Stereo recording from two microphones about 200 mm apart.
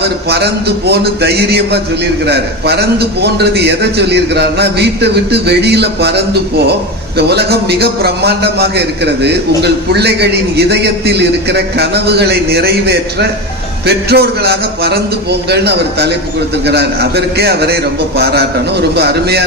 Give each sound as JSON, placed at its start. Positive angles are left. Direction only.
{"t": 0.0, "sound": "a man's voice", "side_deg": -55}